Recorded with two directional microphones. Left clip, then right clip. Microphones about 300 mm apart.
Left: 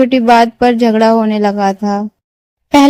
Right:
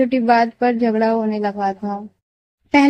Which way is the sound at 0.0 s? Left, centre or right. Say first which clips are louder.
Left 7 dB; left.